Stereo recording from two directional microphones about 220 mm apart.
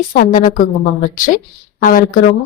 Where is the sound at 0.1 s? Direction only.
40° left (ahead or behind).